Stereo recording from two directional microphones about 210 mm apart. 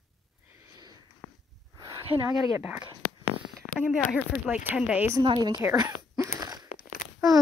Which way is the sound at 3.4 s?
10° left (ahead or behind).